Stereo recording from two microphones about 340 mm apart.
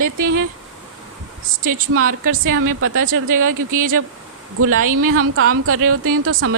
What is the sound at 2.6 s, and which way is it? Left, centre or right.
Speech, right.